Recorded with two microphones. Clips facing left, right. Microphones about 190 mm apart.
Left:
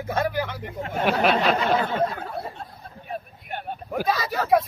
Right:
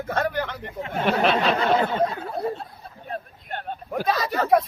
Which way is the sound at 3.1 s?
10° left (ahead or behind).